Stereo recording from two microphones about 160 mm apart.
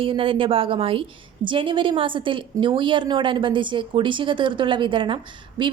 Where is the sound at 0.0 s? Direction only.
35° right (ahead or behind).